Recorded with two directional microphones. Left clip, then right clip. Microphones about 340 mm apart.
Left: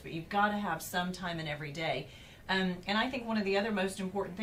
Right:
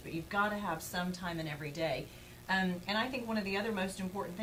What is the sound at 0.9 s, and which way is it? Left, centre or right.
A woman's voice, centre.